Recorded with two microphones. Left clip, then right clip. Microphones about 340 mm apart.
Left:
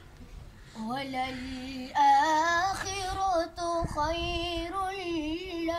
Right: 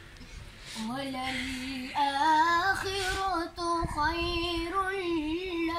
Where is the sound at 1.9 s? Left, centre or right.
Centre.